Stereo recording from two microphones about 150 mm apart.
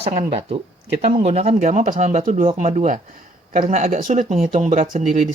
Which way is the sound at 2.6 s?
50° right (ahead or behind).